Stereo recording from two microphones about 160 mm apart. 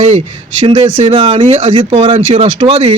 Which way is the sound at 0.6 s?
35° right (ahead or behind).